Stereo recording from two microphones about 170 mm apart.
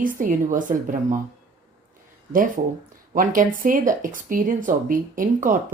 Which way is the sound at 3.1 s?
55° right (ahead or behind).